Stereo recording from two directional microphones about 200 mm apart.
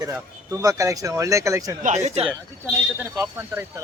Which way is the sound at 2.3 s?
Centre (ahead or behind).